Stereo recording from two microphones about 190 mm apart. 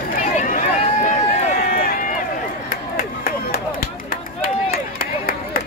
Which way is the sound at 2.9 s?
50° left (ahead or behind).